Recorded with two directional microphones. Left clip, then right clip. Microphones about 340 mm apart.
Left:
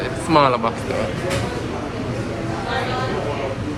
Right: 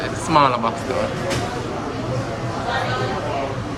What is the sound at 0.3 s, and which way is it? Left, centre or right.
Speech, centre.